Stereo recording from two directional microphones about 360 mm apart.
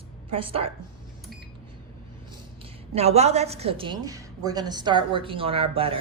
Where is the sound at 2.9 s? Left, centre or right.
Centre.